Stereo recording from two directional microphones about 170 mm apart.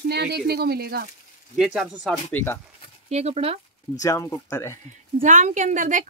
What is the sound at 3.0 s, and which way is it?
Speech, 40° right (ahead or behind).